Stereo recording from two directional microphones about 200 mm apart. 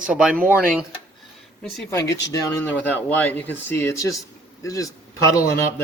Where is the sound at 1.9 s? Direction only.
15° left (ahead or behind).